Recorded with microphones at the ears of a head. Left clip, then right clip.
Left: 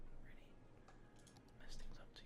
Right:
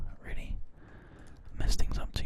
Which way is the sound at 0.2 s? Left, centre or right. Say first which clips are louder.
Right 18 dB; right.